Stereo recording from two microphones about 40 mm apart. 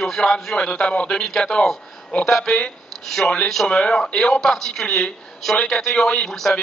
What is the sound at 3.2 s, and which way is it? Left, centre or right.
A man's voice, left.